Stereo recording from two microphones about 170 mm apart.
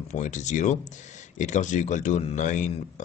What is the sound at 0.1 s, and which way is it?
A man's voice, 45° left (ahead or behind).